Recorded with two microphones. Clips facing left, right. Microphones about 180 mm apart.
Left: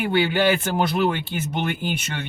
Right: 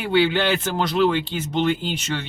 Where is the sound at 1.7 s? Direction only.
55° left (ahead or behind).